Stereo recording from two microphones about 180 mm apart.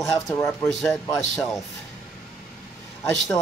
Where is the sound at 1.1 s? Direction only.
Centre (ahead or behind).